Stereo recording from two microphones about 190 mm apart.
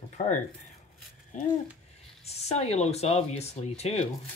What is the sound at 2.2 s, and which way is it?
Speech, 35° left (ahead or behind).